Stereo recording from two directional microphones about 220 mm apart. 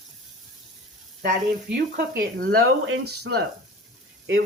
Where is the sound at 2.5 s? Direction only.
70° right (ahead or behind).